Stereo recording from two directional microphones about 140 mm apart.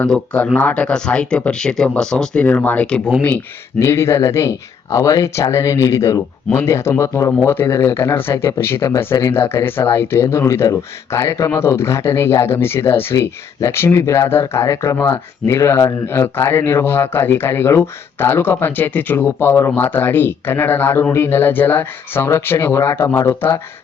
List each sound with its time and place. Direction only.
0.0 s speech: 5° left (ahead or behind)